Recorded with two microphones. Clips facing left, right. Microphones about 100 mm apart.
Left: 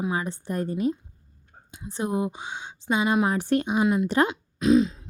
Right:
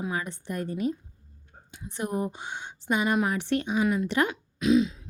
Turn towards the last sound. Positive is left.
turn(degrees=35)  # may be behind; listen again after turning